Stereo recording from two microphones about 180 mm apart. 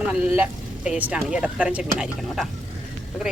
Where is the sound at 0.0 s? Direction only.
5° right (ahead or behind).